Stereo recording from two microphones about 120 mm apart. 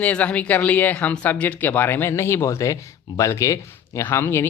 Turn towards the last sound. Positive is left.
turn(degrees=15)  # may be behind; listen again after turning